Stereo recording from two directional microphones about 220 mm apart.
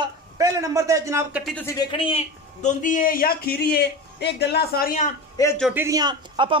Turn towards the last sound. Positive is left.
turn(degrees=-20)  # may be behind; listen again after turning